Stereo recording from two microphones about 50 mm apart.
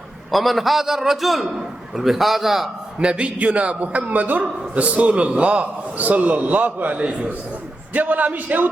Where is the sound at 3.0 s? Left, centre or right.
Right.